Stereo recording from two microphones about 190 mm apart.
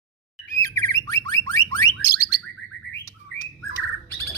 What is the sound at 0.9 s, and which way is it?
Car alarm, 20° left (ahead or behind).